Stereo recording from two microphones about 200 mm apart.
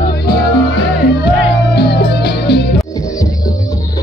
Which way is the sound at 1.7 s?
55° left (ahead or behind).